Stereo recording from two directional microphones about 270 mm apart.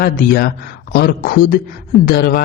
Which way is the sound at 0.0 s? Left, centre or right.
Left.